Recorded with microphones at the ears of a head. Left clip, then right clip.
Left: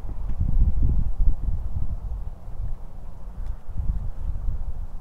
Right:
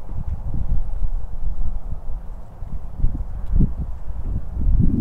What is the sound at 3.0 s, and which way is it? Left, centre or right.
Clip-clop, right.